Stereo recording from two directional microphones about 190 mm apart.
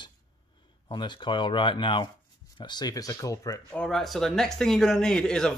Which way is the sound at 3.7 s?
5° left (ahead or behind).